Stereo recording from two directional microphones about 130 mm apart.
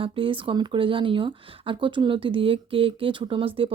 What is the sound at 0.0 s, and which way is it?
Speech, 40° right (ahead or behind).